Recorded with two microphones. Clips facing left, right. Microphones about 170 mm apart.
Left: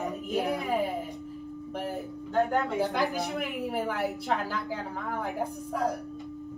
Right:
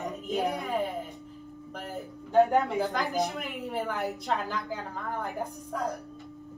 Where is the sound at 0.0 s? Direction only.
Centre (ahead or behind).